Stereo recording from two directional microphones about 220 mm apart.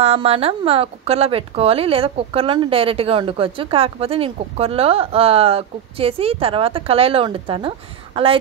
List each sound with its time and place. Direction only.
0.0 s speech: 30° right (ahead or behind)